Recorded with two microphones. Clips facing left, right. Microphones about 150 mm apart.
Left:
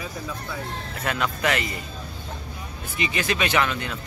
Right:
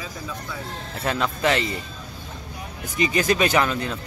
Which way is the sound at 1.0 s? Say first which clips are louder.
Right 3 dB; 30° right (ahead or behind).